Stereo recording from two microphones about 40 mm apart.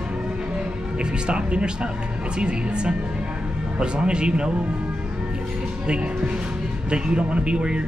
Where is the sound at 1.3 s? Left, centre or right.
Right.